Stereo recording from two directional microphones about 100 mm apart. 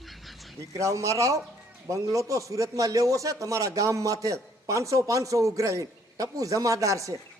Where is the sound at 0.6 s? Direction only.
30° right (ahead or behind).